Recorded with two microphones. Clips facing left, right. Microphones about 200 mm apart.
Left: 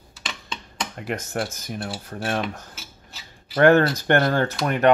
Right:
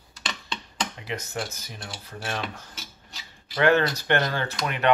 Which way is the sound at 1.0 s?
50° left (ahead or behind).